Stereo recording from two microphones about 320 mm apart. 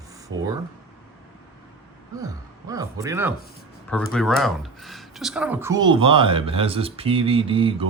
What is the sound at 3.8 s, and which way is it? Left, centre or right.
Speech, centre.